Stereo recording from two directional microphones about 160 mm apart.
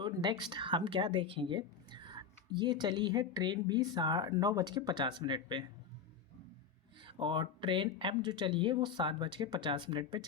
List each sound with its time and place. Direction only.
0.0 s a sound: 30° right (ahead or behind)
0.5 s a woman's voice: 30° right (ahead or behind)
7.0 s speech: 30° right (ahead or behind)